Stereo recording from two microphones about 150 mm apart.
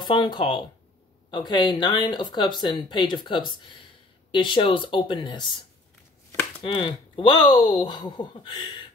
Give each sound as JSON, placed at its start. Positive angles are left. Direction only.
{"t": 0.0, "sound": "speech", "side_deg": 30}
{"t": 6.6, "sound": "speech", "side_deg": 35}